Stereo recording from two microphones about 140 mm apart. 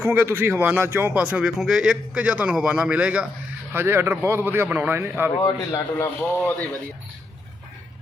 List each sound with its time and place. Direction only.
0.0 s speech: 15° right (ahead or behind)
5.4 s speech: 20° left (ahead or behind)